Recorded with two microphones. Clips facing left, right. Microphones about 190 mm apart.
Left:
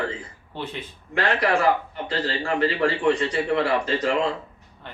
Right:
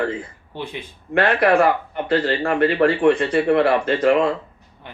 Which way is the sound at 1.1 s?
60° right (ahead or behind).